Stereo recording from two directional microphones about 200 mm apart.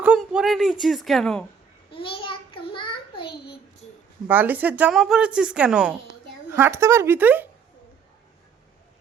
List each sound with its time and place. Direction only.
0.0 s speech: 5° right (ahead or behind)
1.9 s child singing: 25° left (ahead or behind)
3.2 s a sound: 55° left (ahead or behind)
4.3 s a woman's voice: 10° right (ahead or behind)